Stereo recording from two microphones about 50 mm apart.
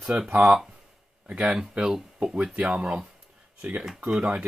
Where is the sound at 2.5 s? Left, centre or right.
Centre.